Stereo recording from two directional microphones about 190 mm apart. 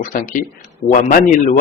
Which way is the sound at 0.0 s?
45° left (ahead or behind).